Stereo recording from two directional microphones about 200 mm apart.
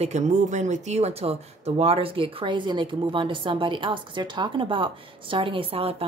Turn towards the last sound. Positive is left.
turn(degrees=-30)  # may be behind; listen again after turning